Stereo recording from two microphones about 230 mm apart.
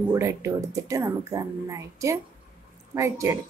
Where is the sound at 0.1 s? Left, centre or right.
Centre.